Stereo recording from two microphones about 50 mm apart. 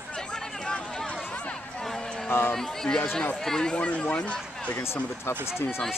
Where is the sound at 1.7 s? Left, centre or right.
Centre.